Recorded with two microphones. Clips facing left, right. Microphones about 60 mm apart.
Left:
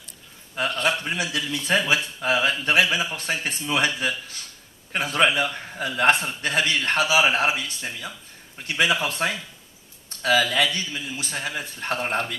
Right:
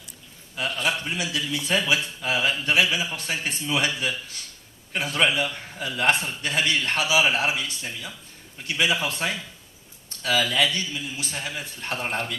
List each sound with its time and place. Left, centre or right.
1.0 s a man's voice: left